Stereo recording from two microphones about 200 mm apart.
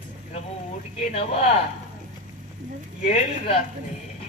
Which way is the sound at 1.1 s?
30° left (ahead or behind).